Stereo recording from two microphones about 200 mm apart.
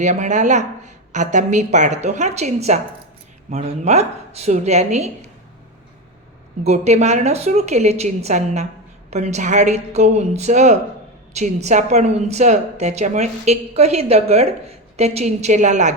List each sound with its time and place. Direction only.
0.0 s a woman's voice: 35° right (ahead or behind)
6.7 s a woman's voice: 35° right (ahead or behind)